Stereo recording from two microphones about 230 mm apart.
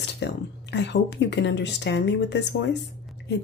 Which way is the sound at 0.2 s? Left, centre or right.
Left.